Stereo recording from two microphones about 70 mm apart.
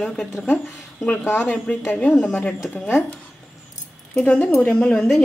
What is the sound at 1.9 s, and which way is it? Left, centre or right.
Speech, centre.